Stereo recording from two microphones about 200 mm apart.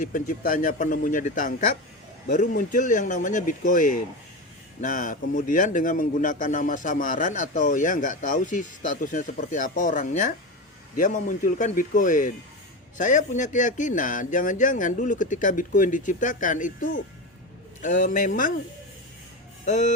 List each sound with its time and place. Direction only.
0.0 s a man's voice: 40° left (ahead or behind)
19.6 s a man's voice: 40° left (ahead or behind)